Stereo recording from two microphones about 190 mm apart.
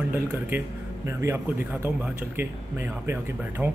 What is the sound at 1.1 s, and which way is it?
Speech, 15° right (ahead or behind).